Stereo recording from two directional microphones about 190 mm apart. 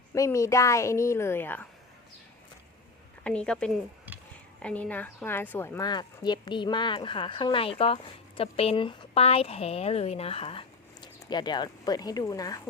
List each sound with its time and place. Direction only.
0.1 s a woman's voice: 15° left (ahead or behind)
3.2 s a woman's voice: 5° left (ahead or behind)